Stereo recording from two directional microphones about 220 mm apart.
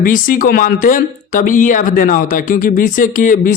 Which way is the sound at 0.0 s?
40° left (ahead or behind).